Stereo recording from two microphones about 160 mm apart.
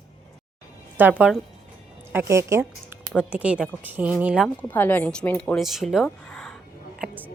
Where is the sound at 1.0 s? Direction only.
10° right (ahead or behind).